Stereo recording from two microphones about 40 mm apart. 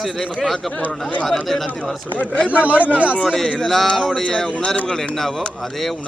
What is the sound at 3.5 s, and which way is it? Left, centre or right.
Speech, centre.